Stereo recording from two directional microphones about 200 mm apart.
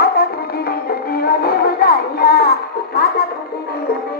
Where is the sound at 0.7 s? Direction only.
50° left (ahead or behind).